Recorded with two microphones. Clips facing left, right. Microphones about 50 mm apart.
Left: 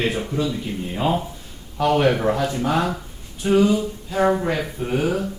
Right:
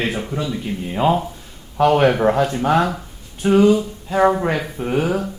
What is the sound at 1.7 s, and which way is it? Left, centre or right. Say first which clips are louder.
Speech: right 4 dB; right.